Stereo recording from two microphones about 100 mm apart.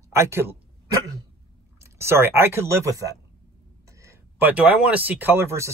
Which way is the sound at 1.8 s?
25° right (ahead or behind).